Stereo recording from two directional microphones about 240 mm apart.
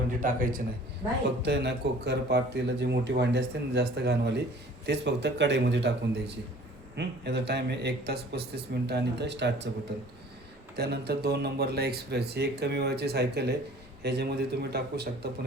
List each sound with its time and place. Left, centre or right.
0.2 s a man's voice: right
10.8 s a man's voice: right